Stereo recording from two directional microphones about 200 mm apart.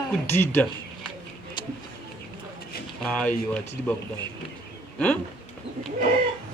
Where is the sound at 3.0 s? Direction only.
5° left (ahead or behind).